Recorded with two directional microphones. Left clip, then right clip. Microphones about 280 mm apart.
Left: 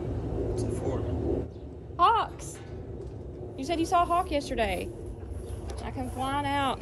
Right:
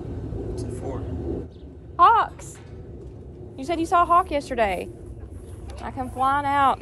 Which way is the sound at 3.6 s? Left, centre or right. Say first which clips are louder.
Right 5 dB; centre.